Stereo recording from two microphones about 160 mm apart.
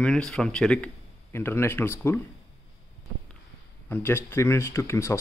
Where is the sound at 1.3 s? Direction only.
15° left (ahead or behind).